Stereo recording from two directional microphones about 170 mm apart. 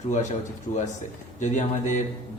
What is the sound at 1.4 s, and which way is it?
Speech, 45° left (ahead or behind).